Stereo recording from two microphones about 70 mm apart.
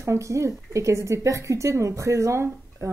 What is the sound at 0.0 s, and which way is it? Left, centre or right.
A woman's voice, right.